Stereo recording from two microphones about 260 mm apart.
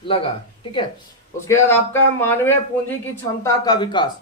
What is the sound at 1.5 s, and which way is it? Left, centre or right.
A man's voice, centre.